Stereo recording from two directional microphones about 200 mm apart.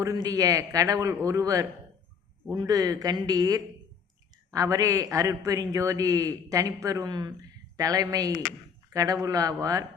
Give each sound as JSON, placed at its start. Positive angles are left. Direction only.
{"t": 0.0, "sound": "a man's voice", "side_deg": -15}